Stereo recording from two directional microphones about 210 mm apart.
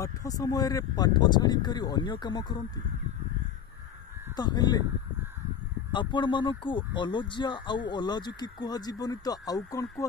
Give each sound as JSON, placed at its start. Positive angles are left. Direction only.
{"t": 0.0, "sound": "speech", "side_deg": 15}
{"t": 4.4, "sound": "speech", "side_deg": 20}
{"t": 5.9, "sound": "speech", "side_deg": 20}